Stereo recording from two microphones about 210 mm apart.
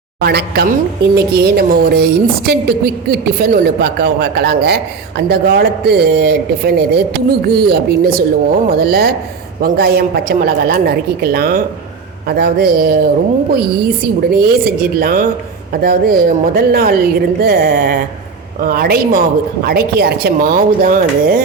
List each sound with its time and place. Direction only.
0.2 s a woman's voice: 50° right (ahead or behind)